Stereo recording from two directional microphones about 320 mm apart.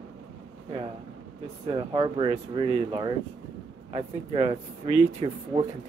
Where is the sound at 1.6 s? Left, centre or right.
Centre.